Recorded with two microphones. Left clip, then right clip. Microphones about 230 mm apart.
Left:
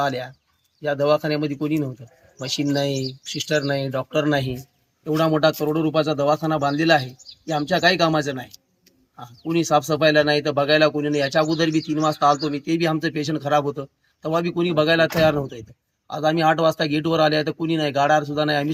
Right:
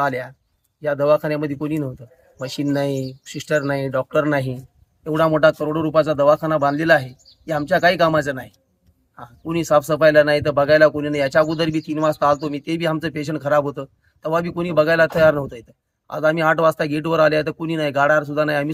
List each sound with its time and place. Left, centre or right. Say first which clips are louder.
0.0 s speech: right 2 dB; centre
9.5 s speech: right 2 dB; right